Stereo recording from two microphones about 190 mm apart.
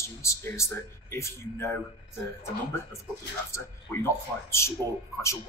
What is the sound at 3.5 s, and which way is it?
Speech, 15° left (ahead or behind).